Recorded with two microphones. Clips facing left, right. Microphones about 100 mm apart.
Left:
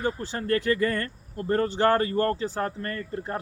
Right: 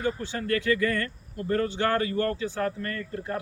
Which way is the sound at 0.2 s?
35° left (ahead or behind).